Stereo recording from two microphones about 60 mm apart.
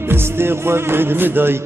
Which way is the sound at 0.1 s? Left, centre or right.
Right.